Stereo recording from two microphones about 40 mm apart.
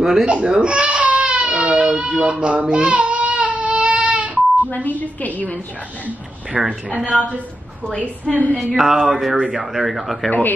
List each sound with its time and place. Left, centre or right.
0.0 s speech: centre
0.3 s baby cry: right
4.6 s a woman's voice: left
6.5 s a sound: centre
8.3 s a woman's voice: left
8.7 s a sound: centre
9.8 s speech: right